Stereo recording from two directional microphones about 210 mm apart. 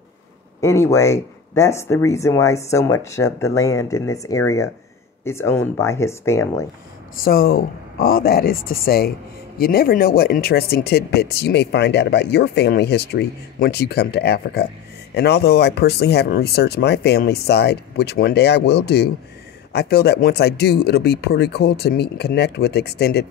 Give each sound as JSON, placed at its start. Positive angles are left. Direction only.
{"t": 0.6, "sound": "speech", "side_deg": 15}
{"t": 7.2, "sound": "speech", "side_deg": 45}